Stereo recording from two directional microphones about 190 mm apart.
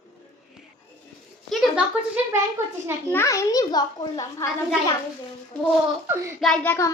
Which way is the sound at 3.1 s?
15° left (ahead or behind).